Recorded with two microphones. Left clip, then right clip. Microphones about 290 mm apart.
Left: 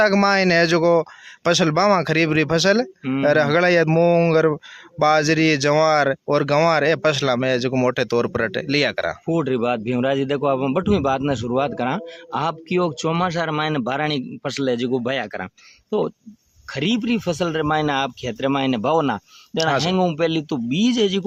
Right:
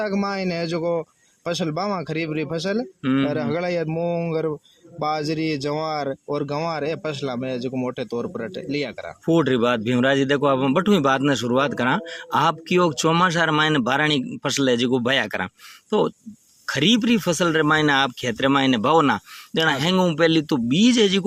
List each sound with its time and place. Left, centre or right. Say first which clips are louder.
0.0 s speech: left 9 dB; left
3.0 s speech: right 2 dB; centre
3.2 s speech: left 8 dB; left
9.3 s a man's voice: right 3 dB; centre